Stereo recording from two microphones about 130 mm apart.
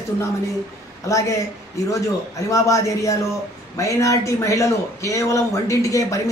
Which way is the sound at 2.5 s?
25° left (ahead or behind).